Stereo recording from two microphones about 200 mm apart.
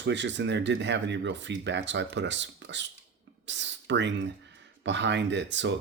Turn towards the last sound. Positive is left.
turn(degrees=-65)  # may be behind; listen again after turning